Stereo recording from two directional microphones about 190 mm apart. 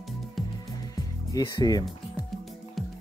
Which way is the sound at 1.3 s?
20° left (ahead or behind).